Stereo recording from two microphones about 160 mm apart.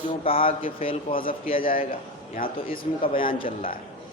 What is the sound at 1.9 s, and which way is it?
A man's voice, 65° left (ahead or behind).